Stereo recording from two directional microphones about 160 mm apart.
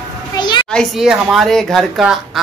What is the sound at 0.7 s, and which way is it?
Speech, centre (ahead or behind).